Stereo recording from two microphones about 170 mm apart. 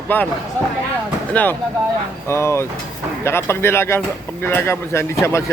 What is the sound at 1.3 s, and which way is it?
Speech, 10° left (ahead or behind).